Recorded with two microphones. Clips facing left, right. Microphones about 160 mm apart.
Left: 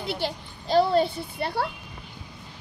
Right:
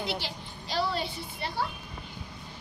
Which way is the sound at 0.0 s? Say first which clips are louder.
Left 5 dB; 50° left (ahead or behind).